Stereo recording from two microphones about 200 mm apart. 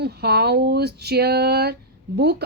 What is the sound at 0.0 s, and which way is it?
Speech, 55° right (ahead or behind).